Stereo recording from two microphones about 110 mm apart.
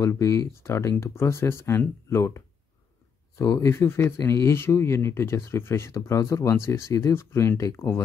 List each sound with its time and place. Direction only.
0.0 s speech: 30° left (ahead or behind)